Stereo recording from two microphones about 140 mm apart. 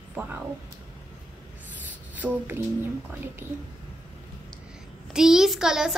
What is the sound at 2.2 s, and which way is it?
Speech, 5° right (ahead or behind).